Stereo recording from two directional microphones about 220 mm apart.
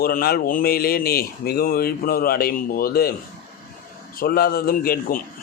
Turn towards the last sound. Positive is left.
turn(degrees=40)  # may be behind; listen again after turning